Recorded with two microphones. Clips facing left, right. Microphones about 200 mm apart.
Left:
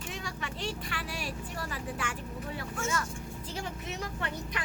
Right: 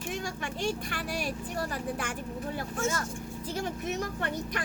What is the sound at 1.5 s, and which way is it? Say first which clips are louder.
Speech: right 5 dB; 40° right (ahead or behind).